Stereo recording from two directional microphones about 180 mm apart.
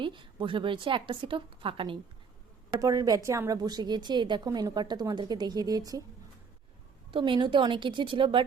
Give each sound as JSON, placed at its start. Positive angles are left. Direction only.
{"t": 0.0, "sound": "a woman's voice", "side_deg": -25}
{"t": 7.1, "sound": "a woman's voice", "side_deg": -25}